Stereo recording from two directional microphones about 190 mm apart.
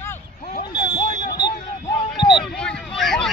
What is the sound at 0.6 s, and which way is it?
Vehicle, 25° left (ahead or behind).